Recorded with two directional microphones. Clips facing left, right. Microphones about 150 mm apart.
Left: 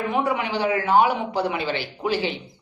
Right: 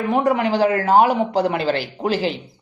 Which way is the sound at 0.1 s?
40° right (ahead or behind).